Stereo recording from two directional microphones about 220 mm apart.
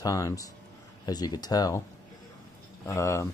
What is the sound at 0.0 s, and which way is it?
Speech, 15° left (ahead or behind).